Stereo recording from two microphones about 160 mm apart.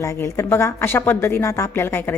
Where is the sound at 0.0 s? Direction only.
15° left (ahead or behind).